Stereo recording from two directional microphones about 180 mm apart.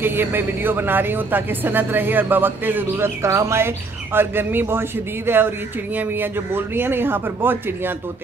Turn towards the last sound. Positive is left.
turn(degrees=-10)  # may be behind; listen again after turning